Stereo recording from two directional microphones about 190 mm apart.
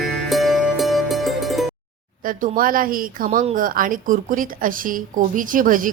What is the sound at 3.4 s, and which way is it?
Speech, 35° right (ahead or behind).